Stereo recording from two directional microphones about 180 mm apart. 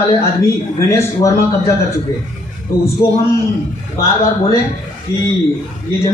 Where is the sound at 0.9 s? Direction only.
15° left (ahead or behind).